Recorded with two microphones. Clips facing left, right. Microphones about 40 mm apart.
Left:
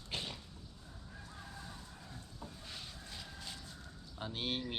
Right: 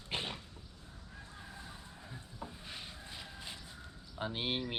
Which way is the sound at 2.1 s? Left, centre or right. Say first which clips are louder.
Right 5 dB; right.